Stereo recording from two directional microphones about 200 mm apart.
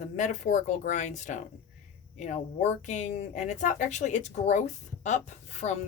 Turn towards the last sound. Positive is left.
turn(degrees=35)  # may be behind; listen again after turning